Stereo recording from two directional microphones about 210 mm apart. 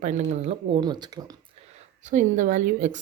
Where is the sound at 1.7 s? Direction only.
35° right (ahead or behind).